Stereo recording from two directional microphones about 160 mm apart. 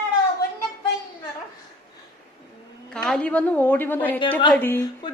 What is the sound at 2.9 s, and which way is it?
A woman's voice, 5° left (ahead or behind).